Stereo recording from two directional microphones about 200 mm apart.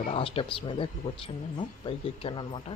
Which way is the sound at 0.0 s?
30° left (ahead or behind).